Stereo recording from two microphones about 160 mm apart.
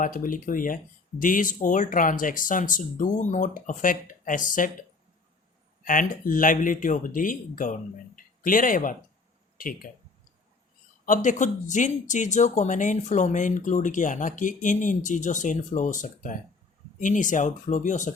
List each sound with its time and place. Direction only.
0.0 s speech: 60° left (ahead or behind)
5.8 s speech: 60° left (ahead or behind)
11.0 s speech: 55° left (ahead or behind)